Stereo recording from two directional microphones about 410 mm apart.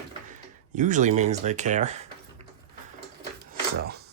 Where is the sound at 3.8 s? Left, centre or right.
Right.